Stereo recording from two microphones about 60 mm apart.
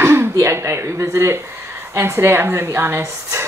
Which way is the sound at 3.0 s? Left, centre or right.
Right.